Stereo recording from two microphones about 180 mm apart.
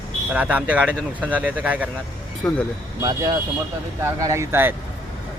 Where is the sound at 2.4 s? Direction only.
5° left (ahead or behind).